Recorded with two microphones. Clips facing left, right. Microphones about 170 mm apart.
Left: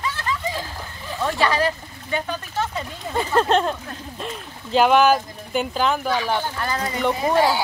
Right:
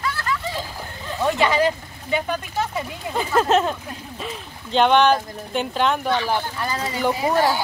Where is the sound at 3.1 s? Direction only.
5° right (ahead or behind).